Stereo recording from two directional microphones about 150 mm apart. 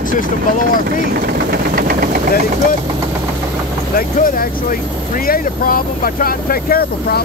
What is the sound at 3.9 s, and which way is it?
Speech, 75° left (ahead or behind).